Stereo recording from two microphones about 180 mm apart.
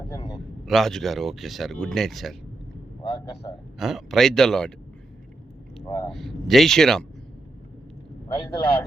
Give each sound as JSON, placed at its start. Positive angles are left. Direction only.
{"t": 0.6, "sound": "speech", "side_deg": 0}
{"t": 3.0, "sound": "a man's voice", "side_deg": 20}
{"t": 3.8, "sound": "speech", "side_deg": 0}
{"t": 5.9, "sound": "a man's voice", "side_deg": 20}
{"t": 6.1, "sound": "speech", "side_deg": 0}
{"t": 8.4, "sound": "a man's voice", "side_deg": 25}